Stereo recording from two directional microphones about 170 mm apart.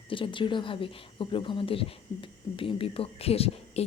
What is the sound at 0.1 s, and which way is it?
Speech, 30° left (ahead or behind).